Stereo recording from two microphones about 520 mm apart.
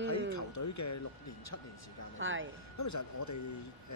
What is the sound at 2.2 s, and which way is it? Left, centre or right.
Speech, right.